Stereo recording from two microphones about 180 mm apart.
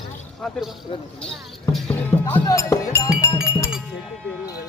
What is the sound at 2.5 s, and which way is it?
Music, 20° left (ahead or behind).